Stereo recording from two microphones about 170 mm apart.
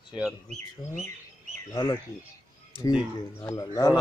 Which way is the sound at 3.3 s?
20° left (ahead or behind).